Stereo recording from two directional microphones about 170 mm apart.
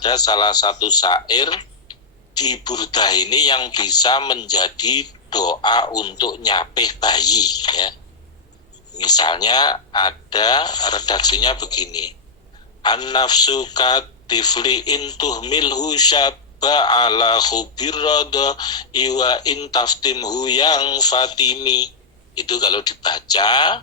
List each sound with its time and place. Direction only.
0.0 s speech: 25° left (ahead or behind)